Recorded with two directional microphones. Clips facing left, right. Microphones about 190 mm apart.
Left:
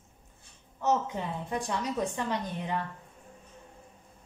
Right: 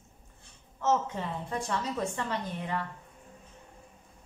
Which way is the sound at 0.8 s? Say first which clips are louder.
Even; 15° left (ahead or behind).